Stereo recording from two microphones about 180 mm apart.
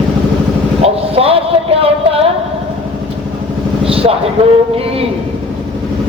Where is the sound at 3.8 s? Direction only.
30° right (ahead or behind).